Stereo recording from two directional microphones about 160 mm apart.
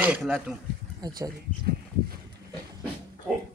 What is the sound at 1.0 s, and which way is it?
Speech, 25° right (ahead or behind).